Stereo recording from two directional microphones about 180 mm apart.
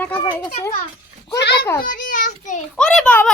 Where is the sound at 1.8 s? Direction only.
45° left (ahead or behind).